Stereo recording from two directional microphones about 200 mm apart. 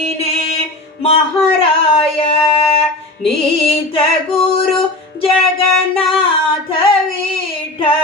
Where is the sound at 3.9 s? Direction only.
30° left (ahead or behind).